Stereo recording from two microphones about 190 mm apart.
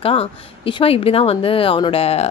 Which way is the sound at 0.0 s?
30° left (ahead or behind).